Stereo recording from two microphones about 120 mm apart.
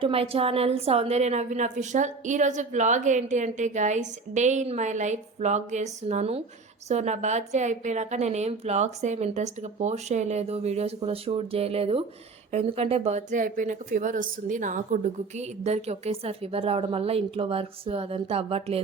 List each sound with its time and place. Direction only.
0.0 s a woman's voice: 55° right (ahead or behind)